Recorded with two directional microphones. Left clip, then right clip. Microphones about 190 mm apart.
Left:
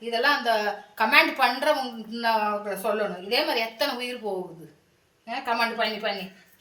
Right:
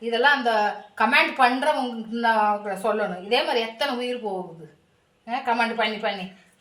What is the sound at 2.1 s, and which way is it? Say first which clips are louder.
A woman's voice: right 4 dB; 15° left (ahead or behind).